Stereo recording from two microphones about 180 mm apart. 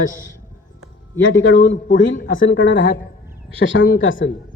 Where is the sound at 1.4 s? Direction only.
90° left.